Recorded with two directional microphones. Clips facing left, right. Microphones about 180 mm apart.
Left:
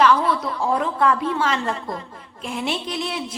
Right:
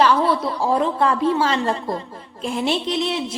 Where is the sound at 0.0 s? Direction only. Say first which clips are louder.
Right 1 dB; 30° right (ahead or behind).